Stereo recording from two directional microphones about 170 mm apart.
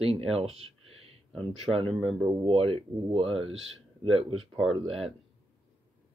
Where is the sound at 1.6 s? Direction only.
35° right (ahead or behind).